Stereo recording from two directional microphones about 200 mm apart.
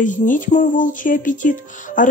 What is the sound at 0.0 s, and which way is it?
Speech, 40° left (ahead or behind).